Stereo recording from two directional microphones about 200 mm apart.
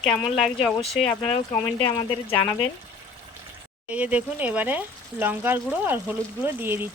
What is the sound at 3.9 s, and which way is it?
Speech, 5° right (ahead or behind).